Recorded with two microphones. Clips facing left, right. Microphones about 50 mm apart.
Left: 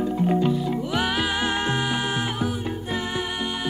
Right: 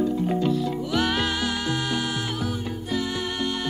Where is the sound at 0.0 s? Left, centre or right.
Left.